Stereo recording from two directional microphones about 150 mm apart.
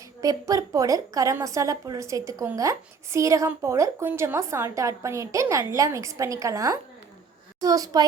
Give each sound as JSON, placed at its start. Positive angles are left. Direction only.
{"t": 0.2, "sound": "a woman's voice", "side_deg": -25}